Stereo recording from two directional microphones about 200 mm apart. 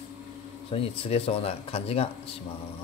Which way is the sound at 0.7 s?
30° left (ahead or behind).